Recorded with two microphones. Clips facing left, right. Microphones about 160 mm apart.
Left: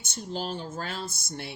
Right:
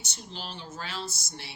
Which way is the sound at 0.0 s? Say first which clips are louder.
Left 8 dB; 50° left (ahead or behind).